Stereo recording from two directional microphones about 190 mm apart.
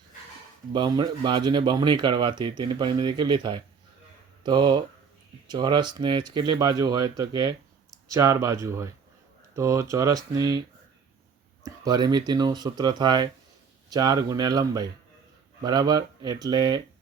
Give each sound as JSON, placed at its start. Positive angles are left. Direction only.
{"t": 0.7, "sound": "speech", "side_deg": -25}
{"t": 11.6, "sound": "speech", "side_deg": -20}